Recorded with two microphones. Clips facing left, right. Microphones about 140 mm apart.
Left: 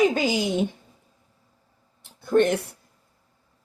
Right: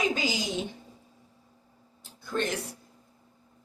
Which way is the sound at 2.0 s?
60° left (ahead or behind).